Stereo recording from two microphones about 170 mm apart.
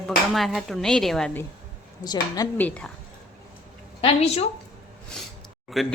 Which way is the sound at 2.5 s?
10° left (ahead or behind).